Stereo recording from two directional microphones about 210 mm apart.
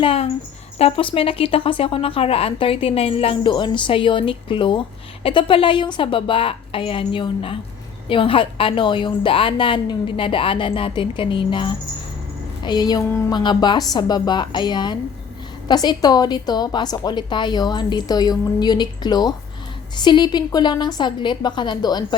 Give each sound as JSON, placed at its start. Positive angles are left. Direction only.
{"t": 0.0, "sound": "speech", "side_deg": 25}